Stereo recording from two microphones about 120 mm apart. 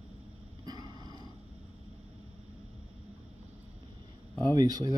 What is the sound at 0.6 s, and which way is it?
Dog, 35° right (ahead or behind).